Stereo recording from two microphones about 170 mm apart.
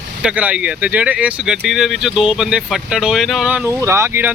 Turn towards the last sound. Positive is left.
turn(degrees=-10)  # may be behind; listen again after turning